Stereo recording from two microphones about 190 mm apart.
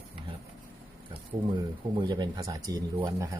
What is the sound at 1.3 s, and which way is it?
Speech, 20° right (ahead or behind).